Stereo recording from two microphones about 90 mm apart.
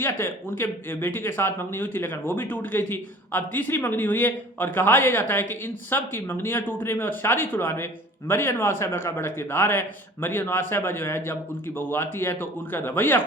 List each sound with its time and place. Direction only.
0.0 s speech: 25° left (ahead or behind)